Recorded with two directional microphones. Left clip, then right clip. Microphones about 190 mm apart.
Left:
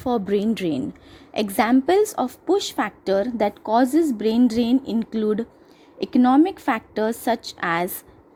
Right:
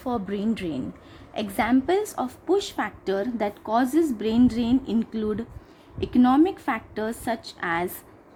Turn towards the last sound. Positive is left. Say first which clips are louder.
# left 4 dB
turn(degrees=35)  # may be behind; listen again after turning